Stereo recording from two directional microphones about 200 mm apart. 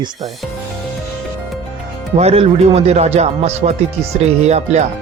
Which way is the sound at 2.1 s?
30° right (ahead or behind).